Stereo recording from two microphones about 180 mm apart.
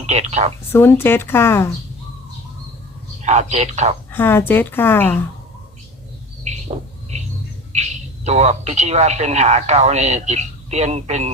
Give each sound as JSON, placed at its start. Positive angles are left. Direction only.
{"t": 0.0, "sound": "speech", "side_deg": -35}
{"t": 0.7, "sound": "a woman's voice", "side_deg": 15}
{"t": 3.2, "sound": "a man's voice", "side_deg": -40}
{"t": 4.1, "sound": "a woman's voice", "side_deg": 10}
{"t": 7.7, "sound": "speech", "side_deg": -40}